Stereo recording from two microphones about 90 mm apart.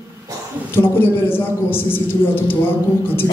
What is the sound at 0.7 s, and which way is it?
A man's voice, 25° left (ahead or behind).